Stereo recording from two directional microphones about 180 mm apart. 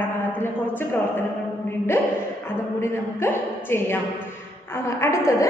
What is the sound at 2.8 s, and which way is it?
A woman's voice, 15° left (ahead or behind).